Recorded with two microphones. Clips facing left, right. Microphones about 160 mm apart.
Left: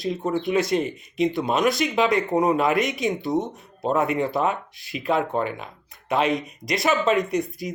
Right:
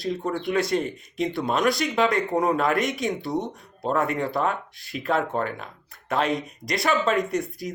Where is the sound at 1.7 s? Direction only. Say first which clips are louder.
Left 2 dB; 20° left (ahead or behind).